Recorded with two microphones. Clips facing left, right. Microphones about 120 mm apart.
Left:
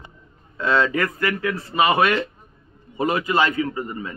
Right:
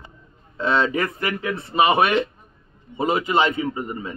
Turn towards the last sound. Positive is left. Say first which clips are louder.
# right 1 dB
turn(degrees=-25)  # may be behind; listen again after turning